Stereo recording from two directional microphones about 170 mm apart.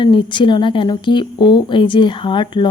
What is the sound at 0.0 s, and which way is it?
Speech, 30° left (ahead or behind).